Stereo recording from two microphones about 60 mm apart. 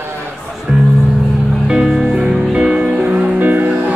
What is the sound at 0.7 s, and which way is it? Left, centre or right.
Music, centre.